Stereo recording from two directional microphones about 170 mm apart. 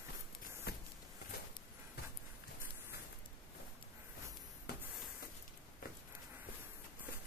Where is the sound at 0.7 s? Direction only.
70° left (ahead or behind).